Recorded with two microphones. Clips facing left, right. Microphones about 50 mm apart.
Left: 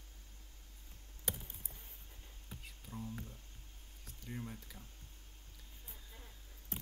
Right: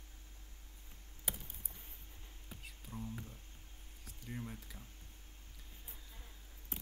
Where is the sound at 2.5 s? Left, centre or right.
Centre.